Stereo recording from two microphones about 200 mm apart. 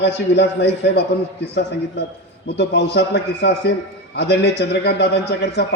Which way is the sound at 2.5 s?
60° left (ahead or behind).